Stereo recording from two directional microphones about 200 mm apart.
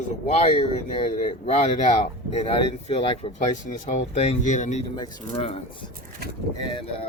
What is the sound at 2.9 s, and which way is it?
Speech, 25° left (ahead or behind).